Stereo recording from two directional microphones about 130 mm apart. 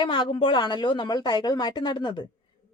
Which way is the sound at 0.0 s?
40° left (ahead or behind).